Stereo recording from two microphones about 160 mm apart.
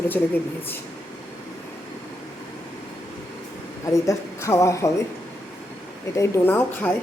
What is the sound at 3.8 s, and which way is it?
Speech, 20° left (ahead or behind).